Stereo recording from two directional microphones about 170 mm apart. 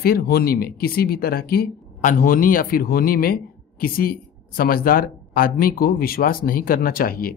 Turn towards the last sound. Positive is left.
turn(degrees=60)  # may be behind; listen again after turning